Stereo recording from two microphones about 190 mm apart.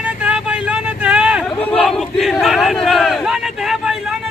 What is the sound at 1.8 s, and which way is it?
Battle cry, centre (ahead or behind).